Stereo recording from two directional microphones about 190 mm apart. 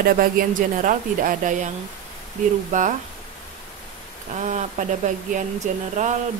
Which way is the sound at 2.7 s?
40° right (ahead or behind).